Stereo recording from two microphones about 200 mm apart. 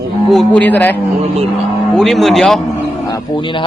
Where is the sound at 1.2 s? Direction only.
30° right (ahead or behind).